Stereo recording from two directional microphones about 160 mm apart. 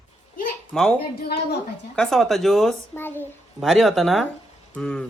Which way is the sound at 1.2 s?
80° left.